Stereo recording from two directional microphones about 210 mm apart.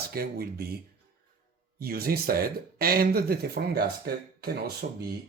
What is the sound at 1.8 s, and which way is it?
Speech, 45° right (ahead or behind).